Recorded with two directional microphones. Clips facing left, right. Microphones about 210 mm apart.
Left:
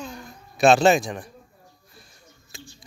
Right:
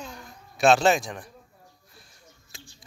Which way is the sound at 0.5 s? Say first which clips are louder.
Left 3 dB; 5° left (ahead or behind).